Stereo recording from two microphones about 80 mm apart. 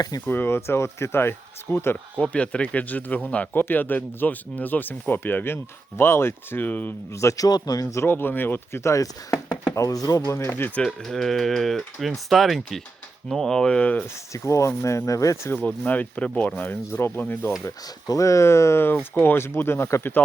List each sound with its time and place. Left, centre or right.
0.3 s speech: left
2.1 s speech: centre
7.1 s a man's voice: left
7.9 s a man's voice: left
10.2 s speech: left
10.8 s speech: centre
14.3 s speech: left
15.5 s speech: left
18.1 s speech: left